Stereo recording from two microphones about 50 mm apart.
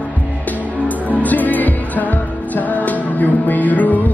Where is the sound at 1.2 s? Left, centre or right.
Left.